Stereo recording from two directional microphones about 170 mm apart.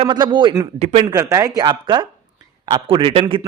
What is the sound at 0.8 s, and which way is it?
Speech, 40° right (ahead or behind).